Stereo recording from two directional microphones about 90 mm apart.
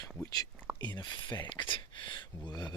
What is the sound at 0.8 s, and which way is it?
Speech, 55° left (ahead or behind).